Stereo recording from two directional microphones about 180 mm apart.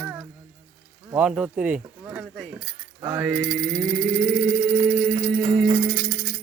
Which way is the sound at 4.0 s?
5° right (ahead or behind).